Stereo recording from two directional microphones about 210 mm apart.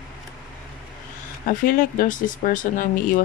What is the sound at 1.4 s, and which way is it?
Speech, 40° left (ahead or behind).